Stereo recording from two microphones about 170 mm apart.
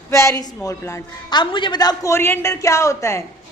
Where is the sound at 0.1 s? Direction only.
15° left (ahead or behind).